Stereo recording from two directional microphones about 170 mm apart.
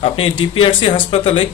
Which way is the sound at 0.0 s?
30° left (ahead or behind).